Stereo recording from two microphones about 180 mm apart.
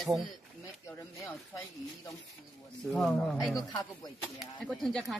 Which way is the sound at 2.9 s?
Centre (ahead or behind).